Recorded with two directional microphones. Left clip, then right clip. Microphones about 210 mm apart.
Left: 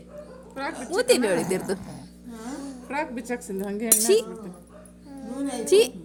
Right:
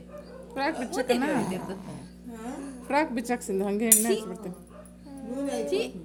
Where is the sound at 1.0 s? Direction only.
50° left (ahead or behind).